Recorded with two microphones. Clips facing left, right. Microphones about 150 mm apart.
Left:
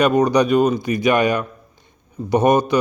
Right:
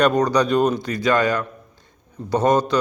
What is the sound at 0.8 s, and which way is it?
A man's voice, 15° left (ahead or behind).